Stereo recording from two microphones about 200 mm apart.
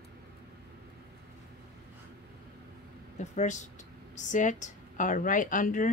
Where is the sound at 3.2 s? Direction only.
35° left (ahead or behind).